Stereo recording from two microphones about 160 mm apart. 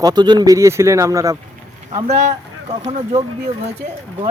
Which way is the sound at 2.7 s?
45° right (ahead or behind).